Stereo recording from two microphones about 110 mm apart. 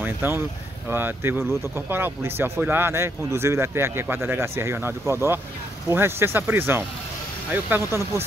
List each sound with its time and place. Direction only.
0.0 s speech: 20° right (ahead or behind)